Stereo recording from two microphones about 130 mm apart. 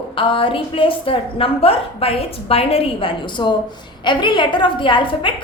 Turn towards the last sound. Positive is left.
turn(degrees=40)  # may be behind; listen again after turning